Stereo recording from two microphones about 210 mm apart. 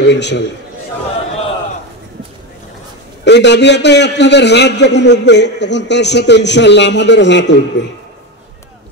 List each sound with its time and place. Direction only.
0.1 s a man's voice: 55° left (ahead or behind)
3.3 s a man's voice: 55° left (ahead or behind)